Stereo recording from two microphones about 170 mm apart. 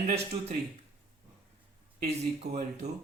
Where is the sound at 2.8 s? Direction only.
40° right (ahead or behind).